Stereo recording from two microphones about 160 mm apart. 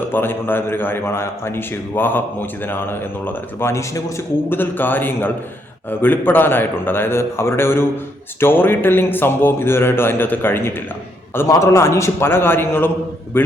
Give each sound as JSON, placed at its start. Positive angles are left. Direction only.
{"t": 0.1, "sound": "a man's voice", "side_deg": 15}